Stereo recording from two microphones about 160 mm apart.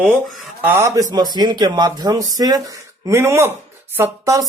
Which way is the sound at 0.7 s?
15° right (ahead or behind).